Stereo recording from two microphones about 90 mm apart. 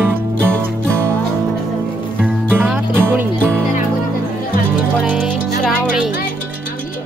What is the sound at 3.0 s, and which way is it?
Music, 25° right (ahead or behind).